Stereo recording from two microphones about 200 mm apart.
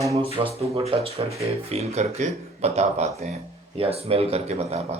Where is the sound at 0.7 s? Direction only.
30° right (ahead or behind).